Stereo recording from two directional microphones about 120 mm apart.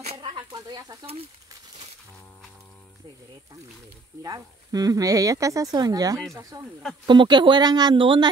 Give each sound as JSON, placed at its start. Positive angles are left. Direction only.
{"t": 0.0, "sound": "a sound", "side_deg": -50}
{"t": 0.5, "sound": "snake", "side_deg": -35}
{"t": 4.2, "sound": "speech", "side_deg": -30}